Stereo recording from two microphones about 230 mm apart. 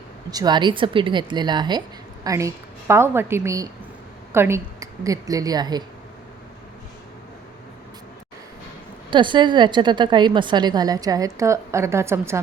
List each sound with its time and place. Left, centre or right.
0.3 s a woman's voice: centre
9.0 s a woman's voice: right